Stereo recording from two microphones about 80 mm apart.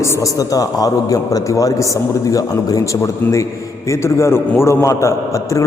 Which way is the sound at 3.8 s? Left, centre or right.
Left.